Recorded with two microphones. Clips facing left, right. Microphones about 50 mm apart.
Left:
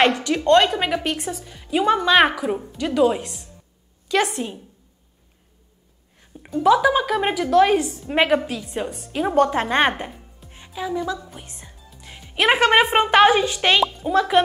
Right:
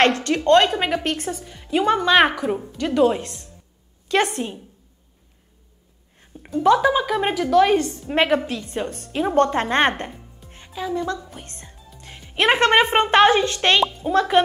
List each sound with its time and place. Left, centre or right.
0.0 s a woman's voice: centre
0.3 s a woman's voice: centre
1.0 s a woman's voice: centre
1.4 s a woman's voice: centre
3.2 s a woman's voice: centre
4.1 s a woman's voice: right
6.3 s a woman's voice: centre
11.2 s music: centre
12.1 s a woman's voice: centre